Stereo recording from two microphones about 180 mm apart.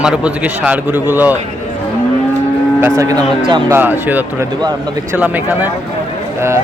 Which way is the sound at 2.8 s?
15° right (ahead or behind).